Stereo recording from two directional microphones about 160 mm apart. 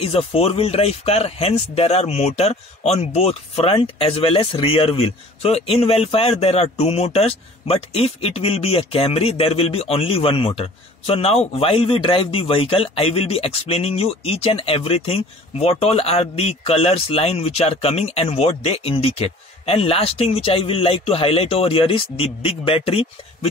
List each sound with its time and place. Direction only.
0.0 s speech: 40° left (ahead or behind)